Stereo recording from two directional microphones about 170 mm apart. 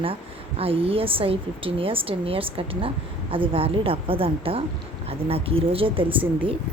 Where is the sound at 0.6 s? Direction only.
35° right (ahead or behind).